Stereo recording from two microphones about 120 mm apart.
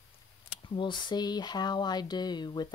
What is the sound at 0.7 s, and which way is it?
Speech, 40° left (ahead or behind).